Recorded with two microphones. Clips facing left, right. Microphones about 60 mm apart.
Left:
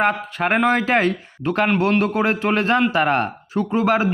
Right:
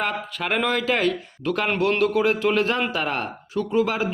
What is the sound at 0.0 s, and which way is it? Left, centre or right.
Speech, left.